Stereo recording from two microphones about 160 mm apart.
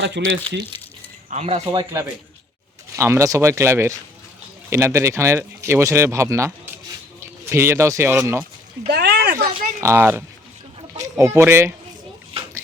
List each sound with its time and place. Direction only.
0.0 s speech: 90° right
1.3 s speech: 45° right (ahead or behind)
1.8 s speech: 20° right (ahead or behind)
8.9 s a sound: 90° right
9.8 s speech: 15° right (ahead or behind)